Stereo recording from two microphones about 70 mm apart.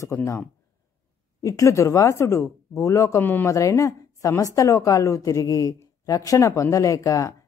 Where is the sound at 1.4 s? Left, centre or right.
Left.